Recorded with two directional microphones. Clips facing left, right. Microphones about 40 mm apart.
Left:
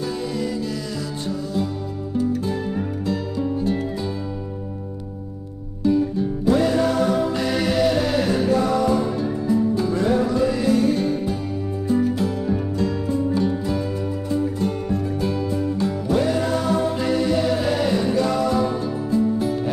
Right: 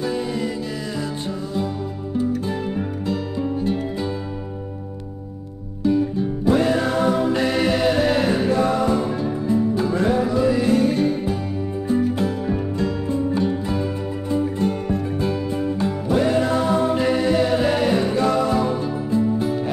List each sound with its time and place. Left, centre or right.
0.0 s music: centre
3.1 s music: centre
5.9 s music: centre
10.1 s music: centre